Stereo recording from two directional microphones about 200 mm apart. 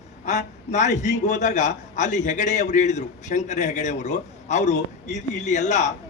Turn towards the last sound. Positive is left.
turn(degrees=35)  # may be behind; listen again after turning